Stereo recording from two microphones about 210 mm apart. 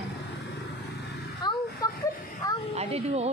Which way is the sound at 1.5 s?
20° left (ahead or behind).